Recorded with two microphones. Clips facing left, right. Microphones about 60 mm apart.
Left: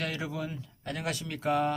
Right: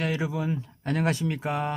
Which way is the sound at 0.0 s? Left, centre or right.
Centre.